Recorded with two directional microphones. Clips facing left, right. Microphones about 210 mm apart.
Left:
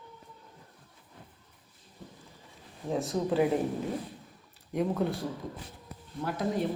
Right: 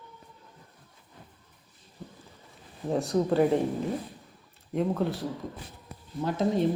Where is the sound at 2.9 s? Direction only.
Centre (ahead or behind).